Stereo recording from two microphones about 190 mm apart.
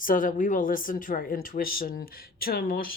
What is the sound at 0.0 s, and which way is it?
Speech, 45° left (ahead or behind).